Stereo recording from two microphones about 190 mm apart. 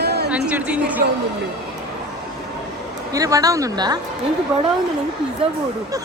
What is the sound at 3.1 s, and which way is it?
Speech, 20° right (ahead or behind).